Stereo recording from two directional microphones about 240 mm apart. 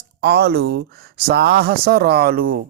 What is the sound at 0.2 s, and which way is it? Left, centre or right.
Speech, right.